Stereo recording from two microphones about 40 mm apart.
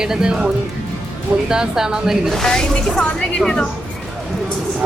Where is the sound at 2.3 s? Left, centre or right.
Centre.